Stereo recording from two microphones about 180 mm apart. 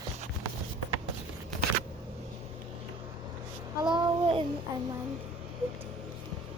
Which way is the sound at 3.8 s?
25° right (ahead or behind).